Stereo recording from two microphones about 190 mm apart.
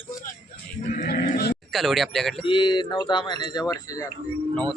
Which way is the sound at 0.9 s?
45° left (ahead or behind).